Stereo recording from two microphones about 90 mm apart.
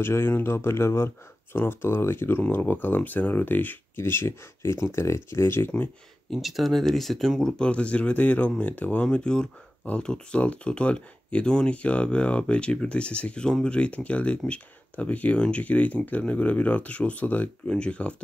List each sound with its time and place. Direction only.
0.0 s speech: 25° left (ahead or behind)
6.3 s speech: centre (ahead or behind)